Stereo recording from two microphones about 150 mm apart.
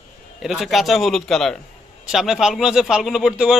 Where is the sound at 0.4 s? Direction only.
Centre (ahead or behind).